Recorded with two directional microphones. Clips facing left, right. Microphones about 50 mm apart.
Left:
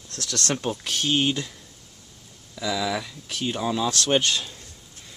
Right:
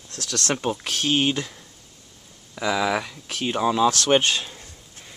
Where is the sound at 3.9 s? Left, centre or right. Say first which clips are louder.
Right 3 dB; right.